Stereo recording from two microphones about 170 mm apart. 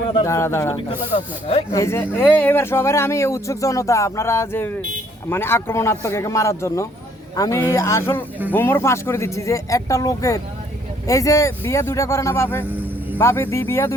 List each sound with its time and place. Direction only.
0.1 s speech: 20° left (ahead or behind)
0.9 s speech: 35° left (ahead or behind)
1.7 s a man's voice: 15° left (ahead or behind)